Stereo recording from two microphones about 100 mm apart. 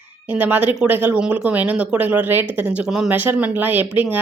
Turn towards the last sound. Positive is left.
turn(degrees=-15)  # may be behind; listen again after turning